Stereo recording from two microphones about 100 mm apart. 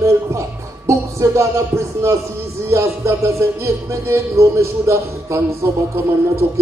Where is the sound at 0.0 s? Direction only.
30° right (ahead or behind).